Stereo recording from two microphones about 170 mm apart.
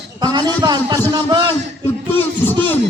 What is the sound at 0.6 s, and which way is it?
Speech, 20° right (ahead or behind).